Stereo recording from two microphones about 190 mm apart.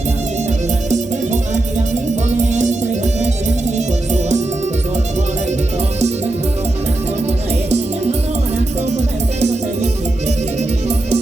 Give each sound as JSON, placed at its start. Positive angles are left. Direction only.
{"t": 0.9, "sound": "music", "side_deg": -40}
{"t": 7.3, "sound": "music", "side_deg": -35}